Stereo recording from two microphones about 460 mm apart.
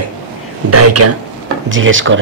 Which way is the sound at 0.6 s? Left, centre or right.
Right.